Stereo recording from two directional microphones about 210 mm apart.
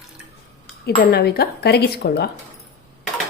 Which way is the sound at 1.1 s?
50° left (ahead or behind).